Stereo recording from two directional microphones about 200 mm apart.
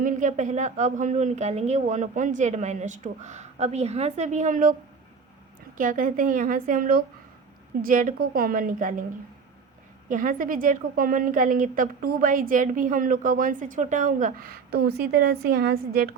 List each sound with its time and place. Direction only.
0.0 s speech: 40° right (ahead or behind)
5.7 s a woman's voice: 40° right (ahead or behind)
10.1 s a woman's voice: 40° right (ahead or behind)